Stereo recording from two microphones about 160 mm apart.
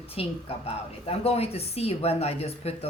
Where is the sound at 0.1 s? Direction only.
40° left (ahead or behind).